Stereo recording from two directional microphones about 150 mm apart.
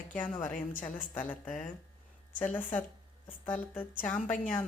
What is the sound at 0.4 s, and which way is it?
Speech, 60° left (ahead or behind).